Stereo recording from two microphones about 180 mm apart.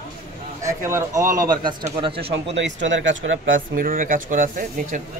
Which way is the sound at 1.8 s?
30° right (ahead or behind).